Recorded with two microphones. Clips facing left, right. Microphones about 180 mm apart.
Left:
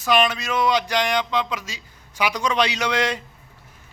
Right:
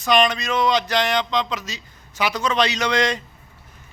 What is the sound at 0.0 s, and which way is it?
Speech, 5° left (ahead or behind).